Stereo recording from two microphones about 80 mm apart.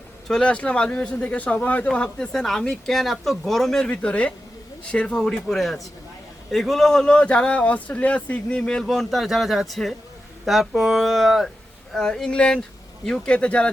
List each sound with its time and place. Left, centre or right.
0.3 s speech: centre
3.8 s speech: centre